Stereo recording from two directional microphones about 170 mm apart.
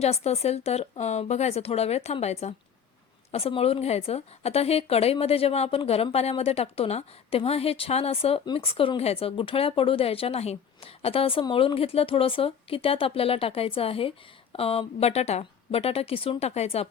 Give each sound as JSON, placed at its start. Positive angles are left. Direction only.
{"t": 0.0, "sound": "a woman's voice", "side_deg": 40}